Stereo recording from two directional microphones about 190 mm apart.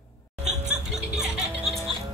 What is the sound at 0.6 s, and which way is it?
Music, 5° right (ahead or behind).